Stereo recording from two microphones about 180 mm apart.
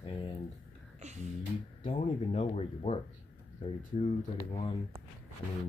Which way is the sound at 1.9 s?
40° left (ahead or behind).